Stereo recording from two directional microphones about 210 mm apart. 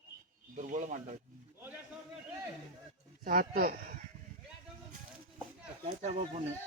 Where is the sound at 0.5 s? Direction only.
35° right (ahead or behind).